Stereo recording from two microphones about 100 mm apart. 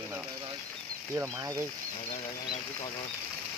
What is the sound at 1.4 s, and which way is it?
Speech, 30° right (ahead or behind).